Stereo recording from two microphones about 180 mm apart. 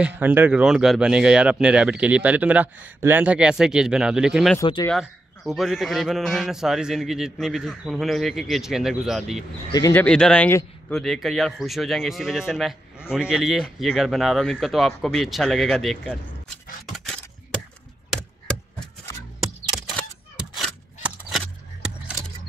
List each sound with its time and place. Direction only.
0.0 s a man's voice: 10° right (ahead or behind)
4.6 s speech: 25° left (ahead or behind)
4.8 s a man's voice: centre (ahead or behind)
9.8 s speech: 20° left (ahead or behind)
10.0 s a man's voice: 5° left (ahead or behind)
19.4 s a sound: centre (ahead or behind)